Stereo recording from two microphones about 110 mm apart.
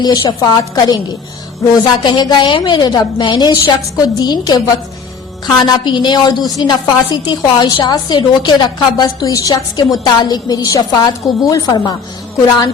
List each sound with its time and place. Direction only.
0.0 s a woman's voice: 40° left (ahead or behind)